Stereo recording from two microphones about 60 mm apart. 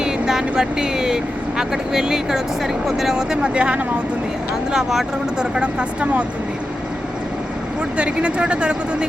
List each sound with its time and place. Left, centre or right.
0.0 s speech: centre
4.7 s speech: centre
5.5 s speech: centre
7.9 s speech: centre